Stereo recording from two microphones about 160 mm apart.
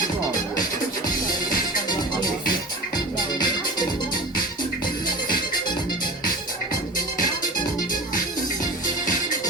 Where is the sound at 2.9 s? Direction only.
25° left (ahead or behind).